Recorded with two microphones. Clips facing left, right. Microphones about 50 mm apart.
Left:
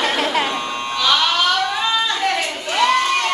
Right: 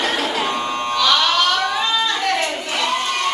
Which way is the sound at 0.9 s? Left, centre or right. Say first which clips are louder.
Right 1 dB; centre.